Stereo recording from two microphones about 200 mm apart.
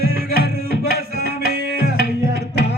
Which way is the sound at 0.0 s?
50° right (ahead or behind).